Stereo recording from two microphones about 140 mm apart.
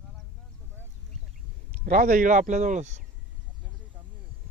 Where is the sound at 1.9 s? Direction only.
75° right (ahead or behind).